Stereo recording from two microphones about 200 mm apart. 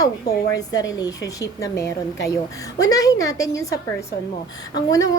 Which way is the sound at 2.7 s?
20° left (ahead or behind).